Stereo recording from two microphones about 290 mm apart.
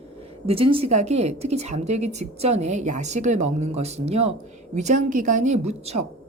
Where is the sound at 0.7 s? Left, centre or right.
Right.